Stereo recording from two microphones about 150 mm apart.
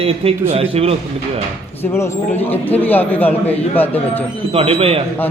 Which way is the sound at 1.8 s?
15° left (ahead or behind).